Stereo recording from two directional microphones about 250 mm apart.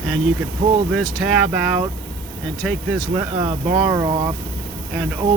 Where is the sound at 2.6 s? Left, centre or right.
Centre.